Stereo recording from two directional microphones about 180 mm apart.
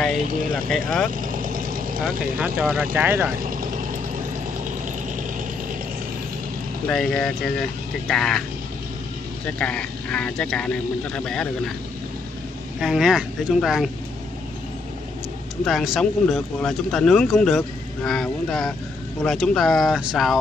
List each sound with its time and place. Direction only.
0.5 s speech: centre (ahead or behind)
1.2 s vehicle: 50° right (ahead or behind)
2.0 s speech: 5° right (ahead or behind)
3.3 s vehicle: 50° right (ahead or behind)
6.9 s speech: 5° left (ahead or behind)
9.6 s speech: 5° left (ahead or behind)
12.8 s speech: centre (ahead or behind)
15.6 s speech: centre (ahead or behind)